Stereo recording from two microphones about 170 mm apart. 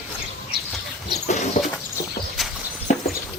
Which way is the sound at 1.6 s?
45° left (ahead or behind).